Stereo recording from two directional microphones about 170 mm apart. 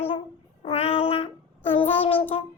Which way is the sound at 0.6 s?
35° left (ahead or behind).